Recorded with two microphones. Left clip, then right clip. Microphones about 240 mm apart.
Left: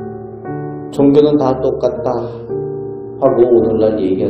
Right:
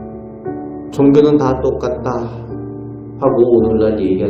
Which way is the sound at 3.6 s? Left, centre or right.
Centre.